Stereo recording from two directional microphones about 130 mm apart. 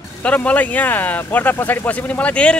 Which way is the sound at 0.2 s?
10° left (ahead or behind).